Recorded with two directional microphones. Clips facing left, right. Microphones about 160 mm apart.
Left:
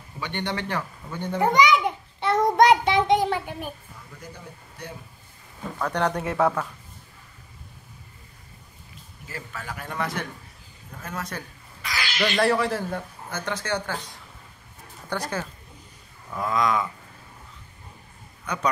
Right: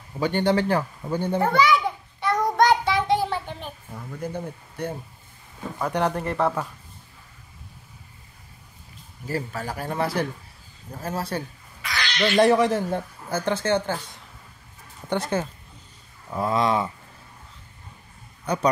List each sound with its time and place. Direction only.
0.2 s a man's voice: 40° right (ahead or behind)
1.4 s child singing: 15° left (ahead or behind)
3.9 s speech: 55° right (ahead or behind)
5.8 s speech: 10° right (ahead or behind)
9.3 s a man's voice: 35° right (ahead or behind)
11.8 s cat: centre (ahead or behind)
12.4 s speech: 20° right (ahead or behind)
15.0 s speech: 25° right (ahead or behind)
18.4 s a man's voice: 35° right (ahead or behind)